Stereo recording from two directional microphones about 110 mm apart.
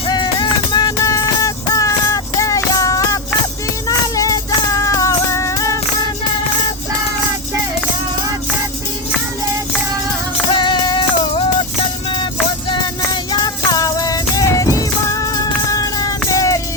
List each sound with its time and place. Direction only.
0.1 s music: 40° left (ahead or behind)
10.5 s music: 45° left (ahead or behind)
12.7 s music: 40° left (ahead or behind)